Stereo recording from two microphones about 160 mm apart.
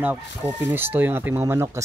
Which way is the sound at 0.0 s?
10° right (ahead or behind).